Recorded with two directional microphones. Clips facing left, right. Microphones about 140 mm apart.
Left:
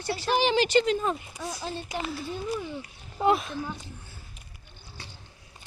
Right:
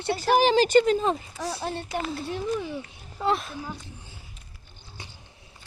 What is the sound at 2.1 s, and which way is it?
Speech, 65° right (ahead or behind).